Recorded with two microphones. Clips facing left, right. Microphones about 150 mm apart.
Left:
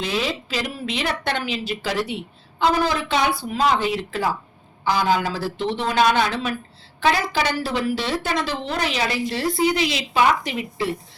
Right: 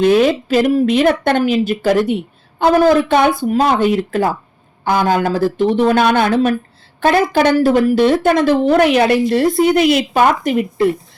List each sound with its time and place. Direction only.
0.0 s a woman's voice: 50° right (ahead or behind)